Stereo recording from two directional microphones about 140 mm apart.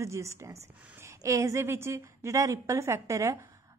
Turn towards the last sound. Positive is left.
turn(degrees=-20)  # may be behind; listen again after turning